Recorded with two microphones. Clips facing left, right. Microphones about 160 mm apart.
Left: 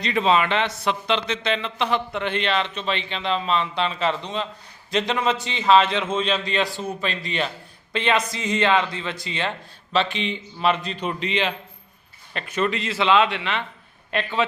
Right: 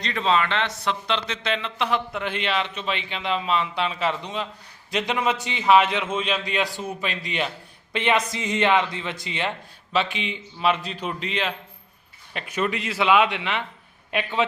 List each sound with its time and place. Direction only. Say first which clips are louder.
0.0 s speech: left 3 dB; 10° left (ahead or behind); by 9.5 s 20° right (ahead or behind)
9.9 s a man's voice: left 2 dB; 10° right (ahead or behind)